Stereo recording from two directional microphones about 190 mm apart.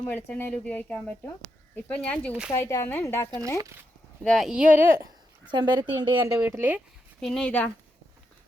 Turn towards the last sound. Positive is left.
turn(degrees=5)  # may be behind; listen again after turning